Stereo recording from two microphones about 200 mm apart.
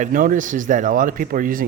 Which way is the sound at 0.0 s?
45° right (ahead or behind).